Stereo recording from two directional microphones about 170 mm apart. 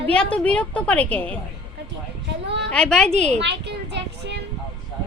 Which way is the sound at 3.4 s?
90° right.